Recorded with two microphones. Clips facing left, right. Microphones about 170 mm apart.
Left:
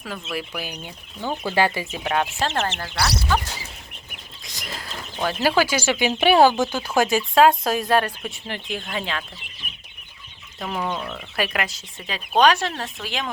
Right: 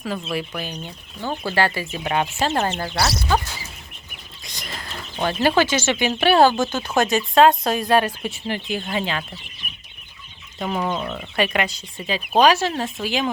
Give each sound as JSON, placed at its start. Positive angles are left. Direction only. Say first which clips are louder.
{"t": 0.3, "sound": "speech", "louder": "right 3 dB", "side_deg": 5}
{"t": 2.0, "sound": "speech", "louder": "right 2 dB", "side_deg": -5}
{"t": 2.7, "sound": "speech", "louder": "right 2 dB", "side_deg": -25}
{"t": 4.4, "sound": "a sound", "louder": "even", "side_deg": 0}
{"t": 5.2, "sound": "speech", "louder": "right 2 dB", "side_deg": 5}
{"t": 10.6, "sound": "speech", "louder": "right 3 dB", "side_deg": -5}
{"t": 11.3, "sound": "speech", "louder": "right 4 dB", "side_deg": 0}